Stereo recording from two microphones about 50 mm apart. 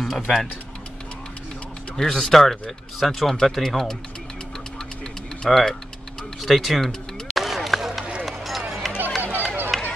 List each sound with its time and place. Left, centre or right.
0.0 s speech: centre
2.0 s speech: centre
5.4 s speech: centre
6.4 s run: centre
9.2 s a sound: right
9.7 s a sound: centre